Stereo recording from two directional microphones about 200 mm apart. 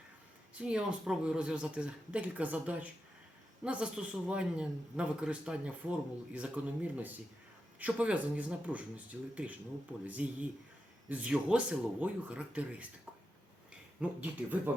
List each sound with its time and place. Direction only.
0.6 s speech: 5° right (ahead or behind)
14.0 s speech: 5° right (ahead or behind)